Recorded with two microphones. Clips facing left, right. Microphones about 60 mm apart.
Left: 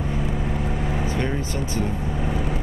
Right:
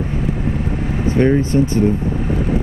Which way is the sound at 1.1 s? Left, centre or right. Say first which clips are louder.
Right 11 dB; right.